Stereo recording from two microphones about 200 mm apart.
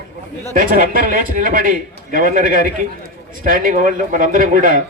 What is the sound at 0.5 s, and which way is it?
A man's voice, 45° right (ahead or behind).